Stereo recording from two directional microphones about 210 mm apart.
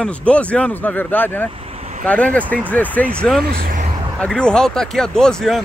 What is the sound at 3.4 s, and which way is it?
Speech, 45° right (ahead or behind).